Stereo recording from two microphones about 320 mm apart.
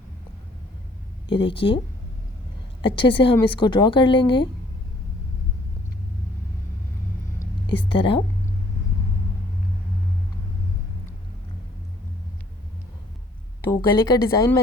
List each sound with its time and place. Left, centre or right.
1.3 s speech: centre
2.8 s speech: centre
7.9 s speech: centre
13.7 s speech: centre